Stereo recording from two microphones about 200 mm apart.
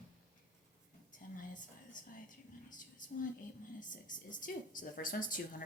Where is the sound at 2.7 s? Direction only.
40° left (ahead or behind).